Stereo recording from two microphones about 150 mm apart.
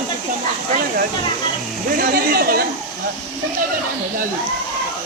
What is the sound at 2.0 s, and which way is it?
Speech, 80° right.